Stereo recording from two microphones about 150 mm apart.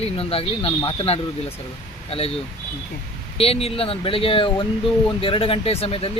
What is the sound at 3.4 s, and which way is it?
Speech, 40° left (ahead or behind).